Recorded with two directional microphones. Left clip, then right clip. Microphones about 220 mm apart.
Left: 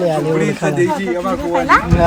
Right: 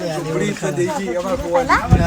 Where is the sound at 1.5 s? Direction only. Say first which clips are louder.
Left 3 dB; 45° left (ahead or behind).